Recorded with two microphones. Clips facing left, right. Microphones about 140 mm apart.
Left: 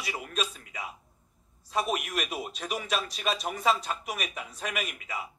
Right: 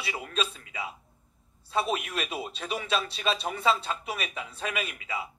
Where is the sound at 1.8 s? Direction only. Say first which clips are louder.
Right 1 dB; 30° right (ahead or behind).